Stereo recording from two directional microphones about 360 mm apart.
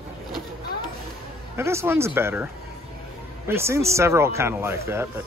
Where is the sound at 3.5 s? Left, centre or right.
Centre.